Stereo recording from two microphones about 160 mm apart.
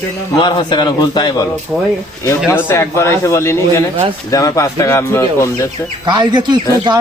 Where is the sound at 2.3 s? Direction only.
15° left (ahead or behind).